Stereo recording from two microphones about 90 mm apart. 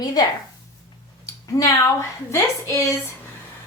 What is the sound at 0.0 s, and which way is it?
Speech, 50° left (ahead or behind).